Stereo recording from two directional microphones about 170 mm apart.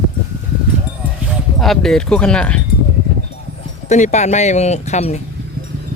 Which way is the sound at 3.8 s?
45° left (ahead or behind).